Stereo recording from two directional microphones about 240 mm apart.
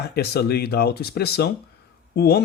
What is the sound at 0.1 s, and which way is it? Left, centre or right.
Speech, left.